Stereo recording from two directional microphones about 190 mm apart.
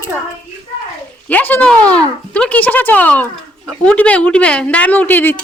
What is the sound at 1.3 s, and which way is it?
A woman's voice, 10° left (ahead or behind).